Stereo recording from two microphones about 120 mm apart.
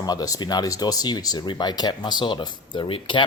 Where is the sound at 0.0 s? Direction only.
30° left (ahead or behind).